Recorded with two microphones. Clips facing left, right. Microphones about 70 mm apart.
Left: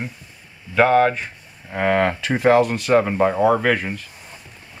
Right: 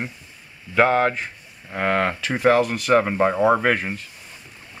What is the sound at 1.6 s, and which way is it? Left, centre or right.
Speech, centre.